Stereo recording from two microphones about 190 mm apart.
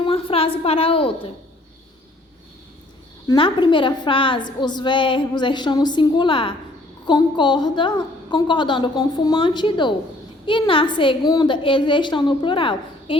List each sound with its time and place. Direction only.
0.0 s a woman's voice: 30° left (ahead or behind)
3.2 s a woman's voice: 25° left (ahead or behind)